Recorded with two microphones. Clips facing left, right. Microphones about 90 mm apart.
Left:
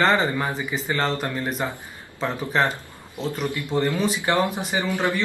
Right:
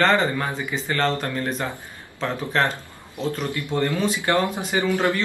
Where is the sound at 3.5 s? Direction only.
20° left (ahead or behind).